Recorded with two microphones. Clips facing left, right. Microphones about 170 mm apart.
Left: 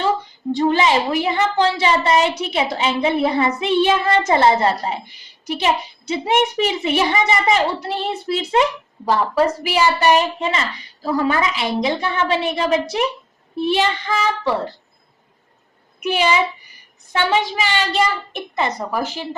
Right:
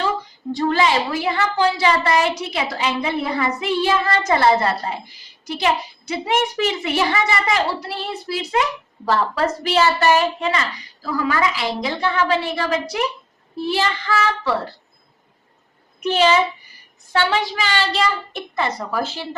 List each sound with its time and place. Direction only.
0.5 s a woman's voice: 20° left (ahead or behind)
9.0 s a woman's voice: 15° left (ahead or behind)
16.0 s a woman's voice: 10° left (ahead or behind)